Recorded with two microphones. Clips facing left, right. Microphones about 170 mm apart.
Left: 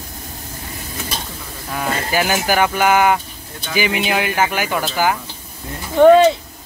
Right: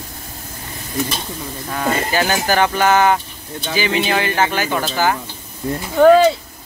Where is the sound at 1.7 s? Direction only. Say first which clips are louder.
Right 2 dB; 10° left (ahead or behind).